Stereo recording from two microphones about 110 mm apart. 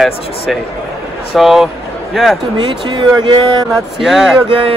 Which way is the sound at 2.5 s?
45° right (ahead or behind).